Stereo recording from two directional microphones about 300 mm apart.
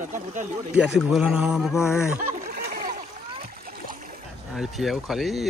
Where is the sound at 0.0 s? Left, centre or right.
Right.